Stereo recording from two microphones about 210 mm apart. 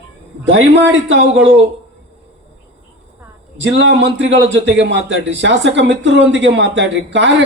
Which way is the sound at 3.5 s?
60° right (ahead or behind).